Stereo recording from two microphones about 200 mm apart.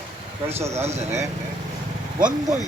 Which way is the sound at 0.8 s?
35° right (ahead or behind).